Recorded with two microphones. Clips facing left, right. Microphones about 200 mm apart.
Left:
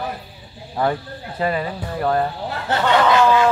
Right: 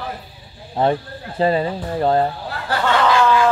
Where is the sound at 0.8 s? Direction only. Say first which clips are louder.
Right 3 dB; 25° right (ahead or behind).